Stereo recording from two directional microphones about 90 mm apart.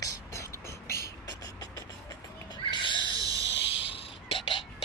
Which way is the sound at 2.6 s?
65° left (ahead or behind).